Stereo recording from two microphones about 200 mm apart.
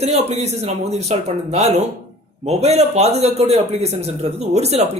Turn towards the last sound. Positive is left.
turn(degrees=-30)  # may be behind; listen again after turning